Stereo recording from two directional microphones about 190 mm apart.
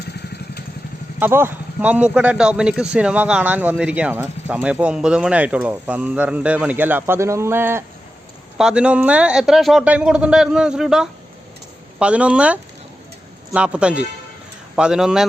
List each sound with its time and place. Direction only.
1.2 s a man's voice: 10° right (ahead or behind)